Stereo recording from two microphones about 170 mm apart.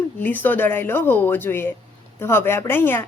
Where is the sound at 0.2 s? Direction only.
10° left (ahead or behind).